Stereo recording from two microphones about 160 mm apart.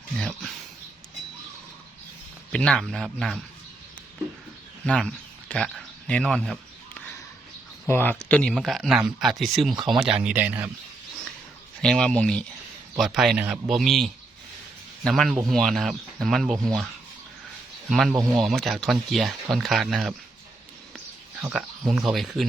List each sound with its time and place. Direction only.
0.2 s speech: 5° left (ahead or behind)
2.5 s speech: 5° left (ahead or behind)
4.9 s speech: 5° left (ahead or behind)
7.9 s speech: 15° left (ahead or behind); by 10.7 s 10° right (ahead or behind)
11.8 s speech: 5° left (ahead or behind)
17.8 s speech: centre (ahead or behind)
21.5 s speech: 5° right (ahead or behind)